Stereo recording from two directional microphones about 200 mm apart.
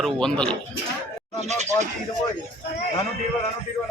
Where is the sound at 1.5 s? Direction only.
35° right (ahead or behind).